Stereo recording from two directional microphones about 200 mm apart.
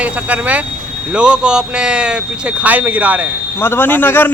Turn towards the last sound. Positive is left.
turn(degrees=10)  # may be behind; listen again after turning